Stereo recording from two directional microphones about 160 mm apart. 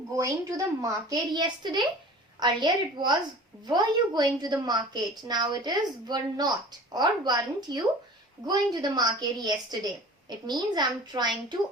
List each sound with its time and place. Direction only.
0.1 s a woman's voice: 20° right (ahead or behind)